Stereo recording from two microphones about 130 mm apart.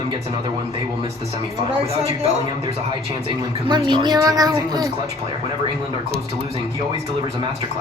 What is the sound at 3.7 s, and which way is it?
A woman's voice, 35° right (ahead or behind).